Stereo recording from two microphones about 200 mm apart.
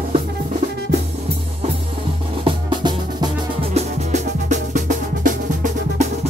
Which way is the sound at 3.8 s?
35° right (ahead or behind).